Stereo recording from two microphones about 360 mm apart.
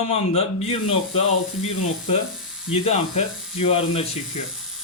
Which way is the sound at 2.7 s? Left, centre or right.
Centre.